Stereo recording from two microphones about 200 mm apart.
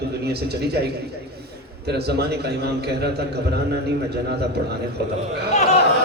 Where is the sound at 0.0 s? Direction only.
55° right (ahead or behind).